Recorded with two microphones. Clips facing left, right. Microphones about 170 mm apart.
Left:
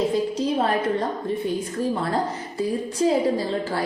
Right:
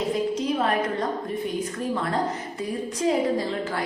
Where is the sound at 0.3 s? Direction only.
30° left (ahead or behind).